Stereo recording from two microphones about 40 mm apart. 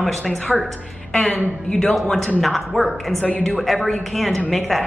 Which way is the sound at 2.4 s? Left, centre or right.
Centre.